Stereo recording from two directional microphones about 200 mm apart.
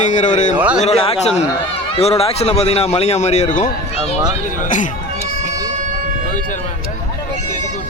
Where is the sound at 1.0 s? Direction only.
30° left (ahead or behind).